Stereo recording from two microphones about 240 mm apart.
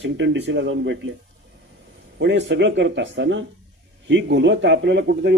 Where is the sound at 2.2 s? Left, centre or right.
Right.